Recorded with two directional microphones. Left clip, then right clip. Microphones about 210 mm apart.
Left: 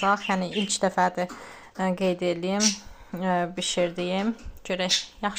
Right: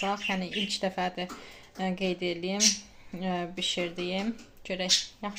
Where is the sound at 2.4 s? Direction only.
20° left (ahead or behind).